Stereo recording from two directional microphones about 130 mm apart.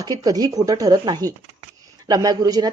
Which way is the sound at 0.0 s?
30° right (ahead or behind).